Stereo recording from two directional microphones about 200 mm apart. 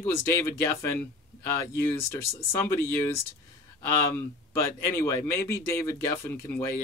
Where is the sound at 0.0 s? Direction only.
15° left (ahead or behind).